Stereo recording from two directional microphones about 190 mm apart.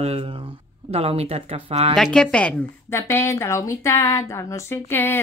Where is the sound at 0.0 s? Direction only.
30° right (ahead or behind).